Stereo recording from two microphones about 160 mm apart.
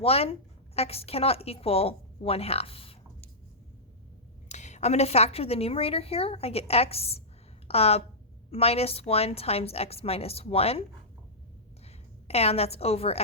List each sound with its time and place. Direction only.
0.0 s a woman's voice: 35° left (ahead or behind)
4.4 s a woman's voice: 45° left (ahead or behind)
11.9 s a woman's voice: 40° left (ahead or behind)